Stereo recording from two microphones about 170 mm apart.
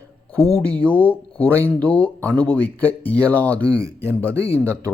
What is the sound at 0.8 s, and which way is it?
Speech, 10° left (ahead or behind).